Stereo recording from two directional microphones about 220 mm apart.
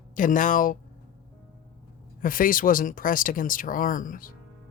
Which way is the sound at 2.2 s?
40° left (ahead or behind).